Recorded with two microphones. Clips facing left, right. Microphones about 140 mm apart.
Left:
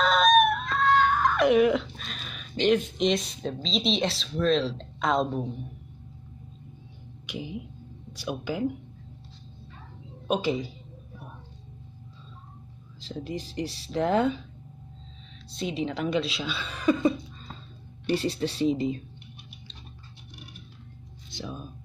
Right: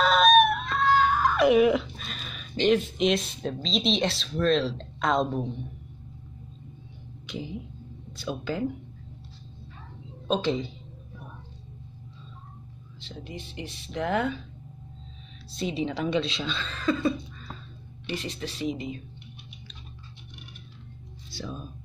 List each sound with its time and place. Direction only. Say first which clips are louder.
0.0 s a sound: right 1 dB; 5° right (ahead or behind)
3.6 s speech: right 1 dB; centre (ahead or behind)
7.2 s speech: even; 10° left (ahead or behind)
10.2 s a woman's voice: even; 10° left (ahead or behind)
13.0 s speech: left 6 dB; 35° left (ahead or behind)
15.5 s speech: right 1 dB; centre (ahead or behind); by 17.5 s 15° left (ahead or behind)
18.0 s speech: left 7 dB; 35° left (ahead or behind)
21.3 s whispering: even; 15° left (ahead or behind)